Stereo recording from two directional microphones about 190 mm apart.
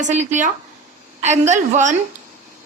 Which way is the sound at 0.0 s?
40° right (ahead or behind).